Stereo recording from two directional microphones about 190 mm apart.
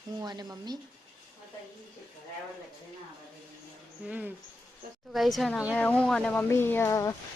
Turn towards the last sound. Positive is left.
turn(degrees=15)  # may be behind; listen again after turning